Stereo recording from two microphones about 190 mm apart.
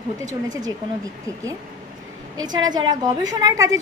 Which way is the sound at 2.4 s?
20° right (ahead or behind).